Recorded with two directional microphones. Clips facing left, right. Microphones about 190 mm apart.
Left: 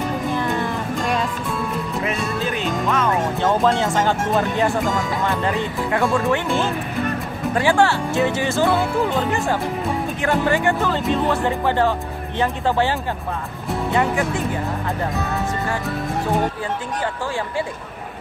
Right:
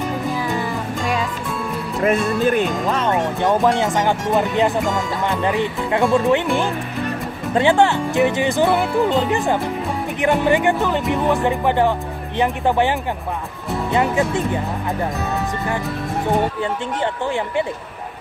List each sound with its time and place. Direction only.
0.3 s music: 5° right (ahead or behind)
2.0 s music: 50° right (ahead or behind)
2.9 s speech: 30° right (ahead or behind)
3.3 s speech: 15° right (ahead or behind)
13.9 s speech: 20° right (ahead or behind)
17.0 s speech: 20° right (ahead or behind)